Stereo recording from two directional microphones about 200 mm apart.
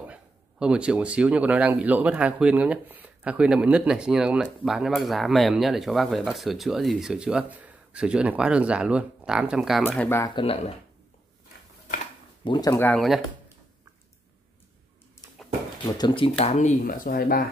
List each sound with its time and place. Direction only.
0.0 s speech: 5° right (ahead or behind)
9.8 s speech: 10° left (ahead or behind)
10.3 s speech: 30° left (ahead or behind)
12.4 s speech: 20° left (ahead or behind); by 13.2 s 5° left (ahead or behind)
16.0 s speech: 25° left (ahead or behind); by 17.5 s 50° left (ahead or behind)